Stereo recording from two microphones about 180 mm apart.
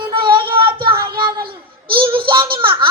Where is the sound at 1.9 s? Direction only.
30° right (ahead or behind).